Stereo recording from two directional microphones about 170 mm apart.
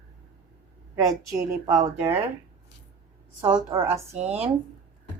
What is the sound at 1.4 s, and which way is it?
Speech, 20° right (ahead or behind).